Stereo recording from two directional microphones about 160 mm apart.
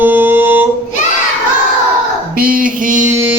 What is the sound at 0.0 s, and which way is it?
Music, 10° right (ahead or behind).